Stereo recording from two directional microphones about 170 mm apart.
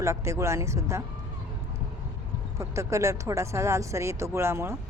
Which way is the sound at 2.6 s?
15° right (ahead or behind).